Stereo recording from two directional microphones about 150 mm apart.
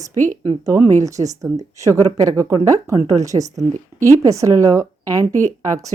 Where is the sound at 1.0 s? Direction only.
20° right (ahead or behind).